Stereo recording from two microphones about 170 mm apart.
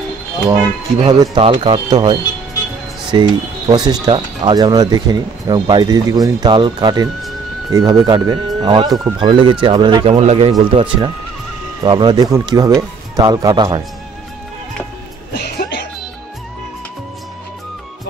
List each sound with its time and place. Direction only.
1.0 s speech: 25° right (ahead or behind)
15.3 s music: 75° left (ahead or behind)